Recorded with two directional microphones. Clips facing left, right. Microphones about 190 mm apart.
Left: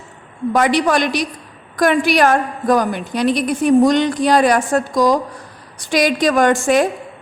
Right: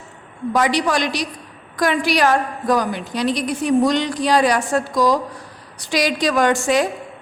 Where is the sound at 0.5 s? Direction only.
55° left (ahead or behind).